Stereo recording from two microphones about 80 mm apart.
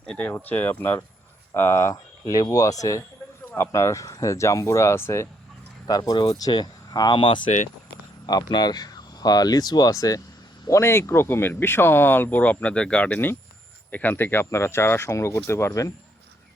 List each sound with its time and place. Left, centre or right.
0.0 s speech: centre
0.3 s speech: left
5.9 s speech: left
6.5 s speech: left
8.3 s speech: left
10.7 s speech: left